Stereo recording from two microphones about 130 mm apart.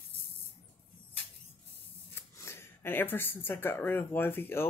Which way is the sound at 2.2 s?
20° left (ahead or behind).